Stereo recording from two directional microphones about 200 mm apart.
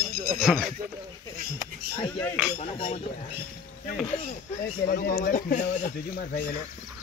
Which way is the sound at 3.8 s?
45° left (ahead or behind).